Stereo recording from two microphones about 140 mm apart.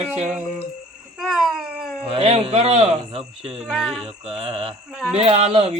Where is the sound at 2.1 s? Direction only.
45° right (ahead or behind).